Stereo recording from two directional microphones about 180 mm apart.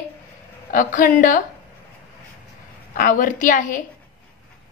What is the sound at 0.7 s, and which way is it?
Speech, 50° left (ahead or behind).